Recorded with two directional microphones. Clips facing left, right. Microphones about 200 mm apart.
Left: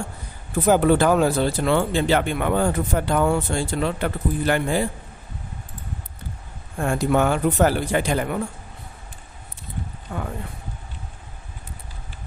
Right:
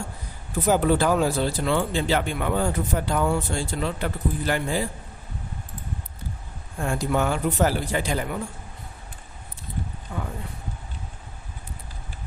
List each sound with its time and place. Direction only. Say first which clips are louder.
0.7 s speech: left 4 dB; 60° left (ahead or behind)
6.8 s speech: left 4 dB; 60° left (ahead or behind)
10.1 s speech: left 3 dB; 60° left (ahead or behind)